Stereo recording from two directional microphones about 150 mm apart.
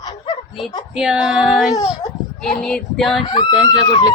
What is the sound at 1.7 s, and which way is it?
Speech, 25° left (ahead or behind).